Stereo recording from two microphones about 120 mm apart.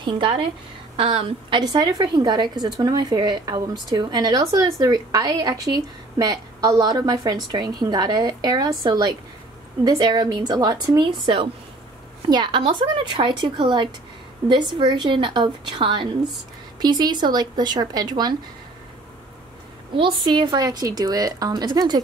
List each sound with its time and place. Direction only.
0.0 s a woman's voice: 45° right (ahead or behind)
1.6 s a woman's voice: 35° right (ahead or behind)
20.0 s speech: 45° right (ahead or behind)